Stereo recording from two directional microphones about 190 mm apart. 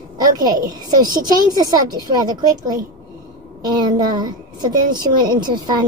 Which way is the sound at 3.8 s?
20° right (ahead or behind).